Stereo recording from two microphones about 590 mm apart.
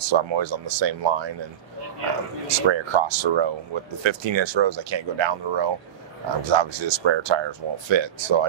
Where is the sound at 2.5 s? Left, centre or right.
Right.